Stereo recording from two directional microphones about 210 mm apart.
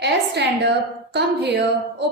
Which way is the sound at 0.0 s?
55° right (ahead or behind).